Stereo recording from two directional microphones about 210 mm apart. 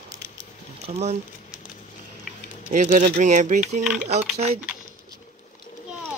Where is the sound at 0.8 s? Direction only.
30° right (ahead or behind).